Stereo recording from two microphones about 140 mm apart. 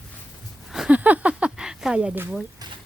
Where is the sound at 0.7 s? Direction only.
5° right (ahead or behind).